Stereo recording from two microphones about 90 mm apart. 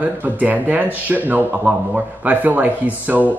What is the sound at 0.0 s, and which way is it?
Speech, 15° right (ahead or behind).